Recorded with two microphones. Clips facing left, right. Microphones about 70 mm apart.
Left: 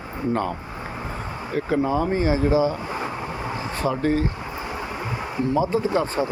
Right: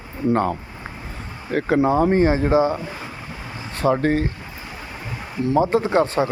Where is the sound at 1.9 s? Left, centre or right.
Right.